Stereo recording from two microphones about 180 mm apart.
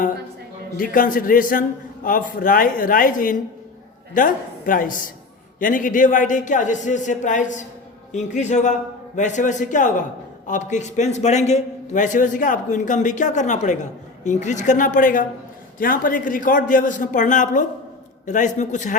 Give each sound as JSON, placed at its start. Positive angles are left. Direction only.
{"t": 0.8, "sound": "a man's voice", "side_deg": 50}